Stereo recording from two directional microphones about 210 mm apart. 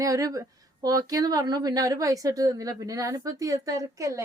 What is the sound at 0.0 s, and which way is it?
Speech, 15° right (ahead or behind).